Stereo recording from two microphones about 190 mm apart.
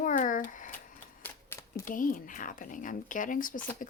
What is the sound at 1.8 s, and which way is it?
Speech, 45° left (ahead or behind).